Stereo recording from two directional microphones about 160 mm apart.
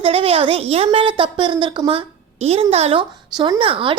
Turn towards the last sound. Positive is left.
turn(degrees=-35)  # may be behind; listen again after turning